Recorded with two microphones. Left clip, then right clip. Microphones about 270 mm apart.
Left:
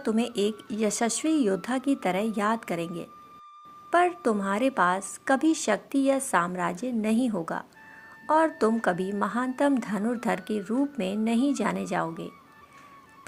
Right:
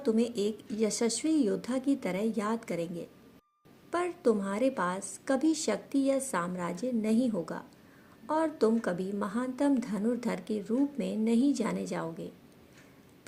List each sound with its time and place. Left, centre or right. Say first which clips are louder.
0.0 s a woman's voice: left 2 dB; left